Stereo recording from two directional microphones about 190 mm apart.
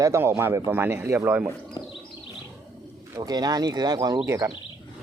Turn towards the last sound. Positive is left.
turn(degrees=-15)  # may be behind; listen again after turning